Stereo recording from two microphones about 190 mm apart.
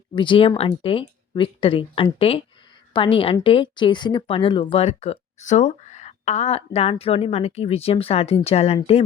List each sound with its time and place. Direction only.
0.2 s speech: 25° left (ahead or behind)